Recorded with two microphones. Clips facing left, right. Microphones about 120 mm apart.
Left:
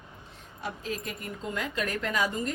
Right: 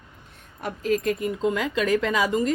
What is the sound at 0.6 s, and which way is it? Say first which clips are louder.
Speech: right 10 dB; 65° right (ahead or behind).